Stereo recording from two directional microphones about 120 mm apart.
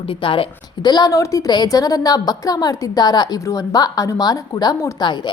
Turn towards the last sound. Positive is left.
turn(degrees=40)  # may be behind; listen again after turning